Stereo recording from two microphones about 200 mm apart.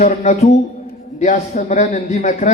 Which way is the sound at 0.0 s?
40° left (ahead or behind).